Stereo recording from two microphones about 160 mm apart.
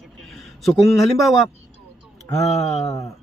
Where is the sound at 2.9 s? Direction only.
20° left (ahead or behind).